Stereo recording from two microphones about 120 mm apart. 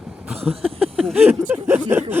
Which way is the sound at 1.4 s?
15° right (ahead or behind).